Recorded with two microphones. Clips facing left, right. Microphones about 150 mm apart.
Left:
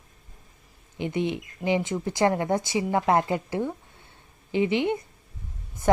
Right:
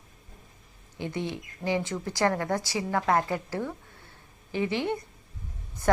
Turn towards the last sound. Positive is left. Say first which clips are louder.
# left 3 dB
turn(degrees=20)  # may be behind; listen again after turning